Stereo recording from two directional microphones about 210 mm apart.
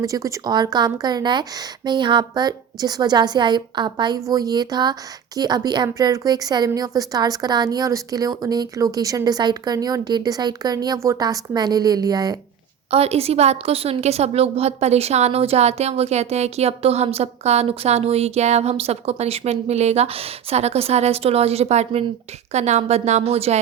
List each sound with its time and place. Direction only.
0.0 s a woman's voice: 15° right (ahead or behind)
12.9 s a woman's voice: 30° right (ahead or behind)